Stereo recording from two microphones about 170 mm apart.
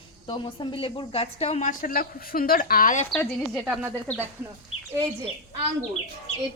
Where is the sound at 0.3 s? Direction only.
30° left (ahead or behind); by 3.1 s 50° left (ahead or behind).